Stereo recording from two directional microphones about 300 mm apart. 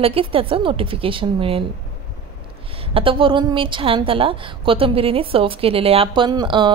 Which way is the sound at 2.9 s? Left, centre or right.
Centre.